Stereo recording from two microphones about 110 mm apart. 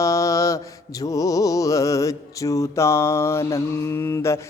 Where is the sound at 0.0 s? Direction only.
30° left (ahead or behind).